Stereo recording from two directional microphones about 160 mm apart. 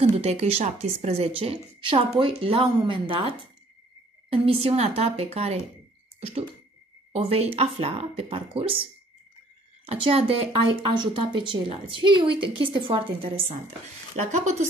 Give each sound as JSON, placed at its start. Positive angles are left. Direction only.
{"t": 0.1, "sound": "speech", "side_deg": -40}
{"t": 7.1, "sound": "speech", "side_deg": -35}
{"t": 9.8, "sound": "speech", "side_deg": -35}